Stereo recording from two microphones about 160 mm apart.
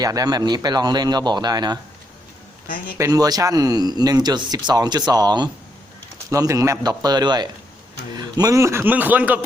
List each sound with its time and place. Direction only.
0.0 s speech: 25° right (ahead or behind)
3.0 s a man's voice: 25° right (ahead or behind)